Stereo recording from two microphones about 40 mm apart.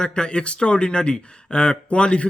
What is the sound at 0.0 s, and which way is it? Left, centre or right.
A man's voice, left.